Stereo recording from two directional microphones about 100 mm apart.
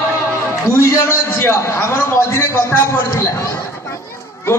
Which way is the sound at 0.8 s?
25° left (ahead or behind).